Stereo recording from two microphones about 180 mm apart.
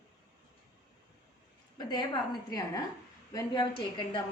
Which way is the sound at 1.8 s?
25° left (ahead or behind).